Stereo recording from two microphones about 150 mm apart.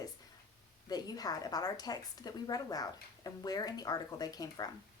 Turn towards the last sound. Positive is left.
turn(degrees=25)  # may be behind; listen again after turning